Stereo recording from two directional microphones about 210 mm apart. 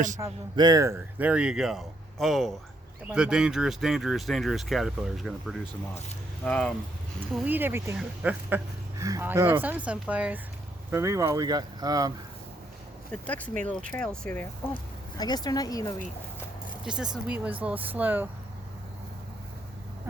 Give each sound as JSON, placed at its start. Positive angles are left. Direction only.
{"t": 0.2, "sound": "speech", "side_deg": -20}
{"t": 7.3, "sound": "speech", "side_deg": -10}
{"t": 13.1, "sound": "speech", "side_deg": 5}
{"t": 15.2, "sound": "speech", "side_deg": 20}
{"t": 16.8, "sound": "speech", "side_deg": -5}